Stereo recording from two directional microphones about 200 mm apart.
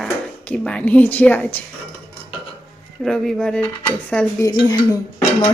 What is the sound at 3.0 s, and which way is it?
A woman's voice, centre (ahead or behind).